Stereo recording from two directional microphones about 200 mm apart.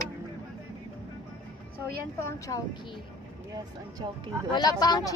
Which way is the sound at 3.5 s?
20° right (ahead or behind).